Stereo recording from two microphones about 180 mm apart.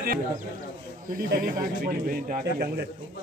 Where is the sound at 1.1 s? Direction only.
55° right (ahead or behind).